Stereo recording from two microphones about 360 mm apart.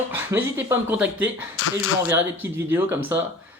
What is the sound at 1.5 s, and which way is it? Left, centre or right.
Speech, left.